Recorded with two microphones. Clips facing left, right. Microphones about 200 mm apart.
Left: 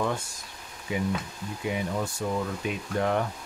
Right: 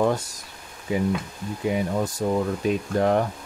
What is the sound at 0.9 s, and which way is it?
Speech, 40° right (ahead or behind).